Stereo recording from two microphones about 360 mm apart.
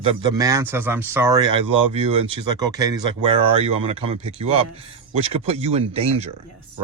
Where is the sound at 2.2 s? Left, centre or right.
Centre.